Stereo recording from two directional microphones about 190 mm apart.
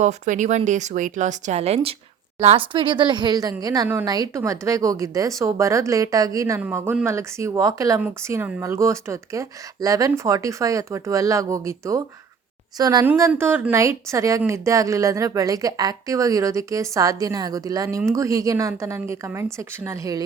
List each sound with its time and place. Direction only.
0.0 s speech: 40° right (ahead or behind); by 20.2 s 15° right (ahead or behind)